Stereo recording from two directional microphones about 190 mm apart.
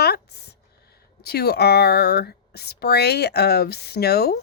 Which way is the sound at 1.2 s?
55° left (ahead or behind).